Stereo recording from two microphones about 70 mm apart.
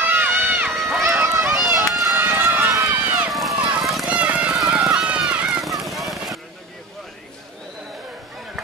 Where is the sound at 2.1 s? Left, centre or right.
Right.